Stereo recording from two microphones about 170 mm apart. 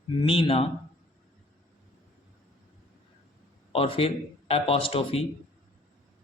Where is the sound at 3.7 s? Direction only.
35° left (ahead or behind).